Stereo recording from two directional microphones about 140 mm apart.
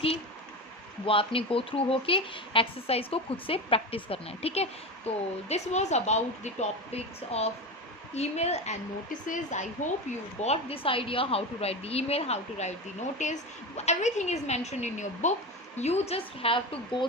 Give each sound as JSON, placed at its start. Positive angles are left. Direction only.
{"t": 1.0, "sound": "speech", "side_deg": 40}
{"t": 9.2, "sound": "a woman's voice", "side_deg": 60}
{"t": 10.1, "sound": "a woman's voice", "side_deg": 50}
{"t": 15.8, "sound": "speech", "side_deg": 50}